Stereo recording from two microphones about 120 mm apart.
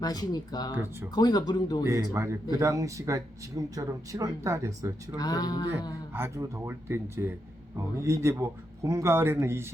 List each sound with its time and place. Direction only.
0.0 s speech: 35° left (ahead or behind)
2.1 s speech: 25° right (ahead or behind)
5.1 s speech: 35° left (ahead or behind)
6.1 s speech: 20° right (ahead or behind)